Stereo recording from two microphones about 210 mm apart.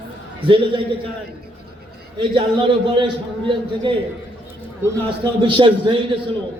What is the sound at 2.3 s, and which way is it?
Speech, 25° right (ahead or behind).